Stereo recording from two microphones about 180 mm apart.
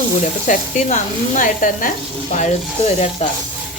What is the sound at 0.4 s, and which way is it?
Speech, 45° left (ahead or behind).